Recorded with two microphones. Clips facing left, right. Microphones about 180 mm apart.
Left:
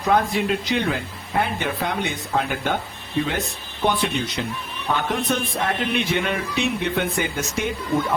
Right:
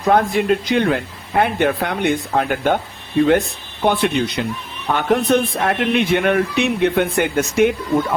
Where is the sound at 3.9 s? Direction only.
60° right (ahead or behind).